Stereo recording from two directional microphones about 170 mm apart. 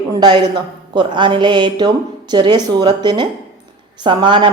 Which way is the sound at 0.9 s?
25° right (ahead or behind).